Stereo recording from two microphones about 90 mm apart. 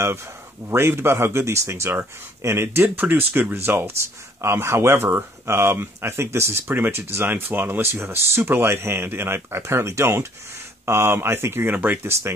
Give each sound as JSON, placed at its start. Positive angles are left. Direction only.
{"t": 0.7, "sound": "speech", "side_deg": -30}